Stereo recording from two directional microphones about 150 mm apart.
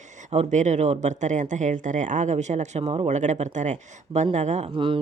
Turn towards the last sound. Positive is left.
turn(degrees=-35)  # may be behind; listen again after turning